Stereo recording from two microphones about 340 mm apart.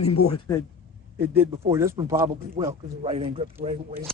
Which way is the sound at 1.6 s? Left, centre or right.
Centre.